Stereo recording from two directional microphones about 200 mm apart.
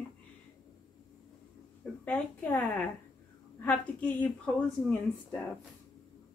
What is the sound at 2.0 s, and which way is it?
Speech, 5° left (ahead or behind).